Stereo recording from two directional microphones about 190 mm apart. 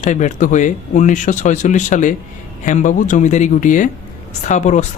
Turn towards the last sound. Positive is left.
turn(degrees=40)  # may be behind; listen again after turning